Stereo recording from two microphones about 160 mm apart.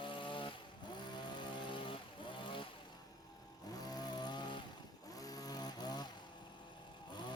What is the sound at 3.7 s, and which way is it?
Vehicle, 25° left (ahead or behind).